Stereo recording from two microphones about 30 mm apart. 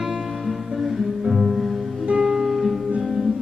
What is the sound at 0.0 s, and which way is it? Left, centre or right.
Music, centre.